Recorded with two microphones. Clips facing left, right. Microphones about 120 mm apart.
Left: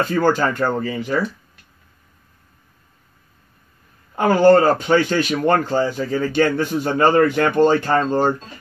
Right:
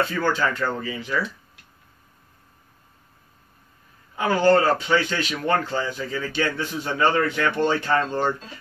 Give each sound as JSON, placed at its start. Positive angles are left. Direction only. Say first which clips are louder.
{"t": 0.1, "sound": "a man's voice", "louder": "left 6 dB", "side_deg": 50}
{"t": 4.1, "sound": "a man's voice", "louder": "left 6 dB", "side_deg": 50}